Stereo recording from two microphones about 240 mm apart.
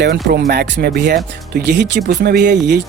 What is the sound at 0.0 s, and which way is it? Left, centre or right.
Speech, right.